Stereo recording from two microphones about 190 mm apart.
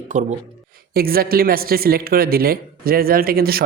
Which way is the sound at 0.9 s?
50° right (ahead or behind).